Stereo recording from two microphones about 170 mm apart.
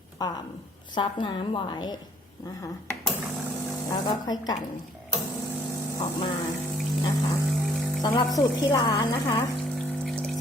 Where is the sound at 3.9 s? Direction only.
25° left (ahead or behind).